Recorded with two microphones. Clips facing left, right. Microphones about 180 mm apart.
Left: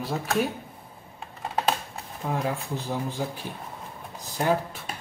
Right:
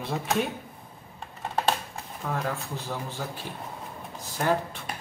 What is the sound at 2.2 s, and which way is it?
Speech, 15° left (ahead or behind).